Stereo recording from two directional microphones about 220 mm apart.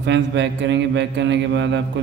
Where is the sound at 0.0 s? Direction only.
55° right (ahead or behind).